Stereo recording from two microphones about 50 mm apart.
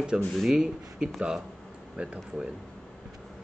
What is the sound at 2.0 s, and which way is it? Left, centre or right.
Speech, right.